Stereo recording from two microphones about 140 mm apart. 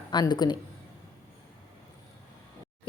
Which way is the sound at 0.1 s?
30° left (ahead or behind).